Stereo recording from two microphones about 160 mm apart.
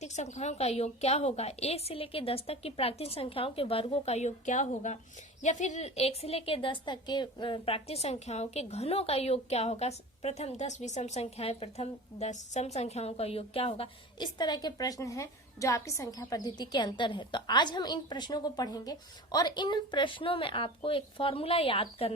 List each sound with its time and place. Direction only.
0.0 s a woman's voice: 45° left (ahead or behind)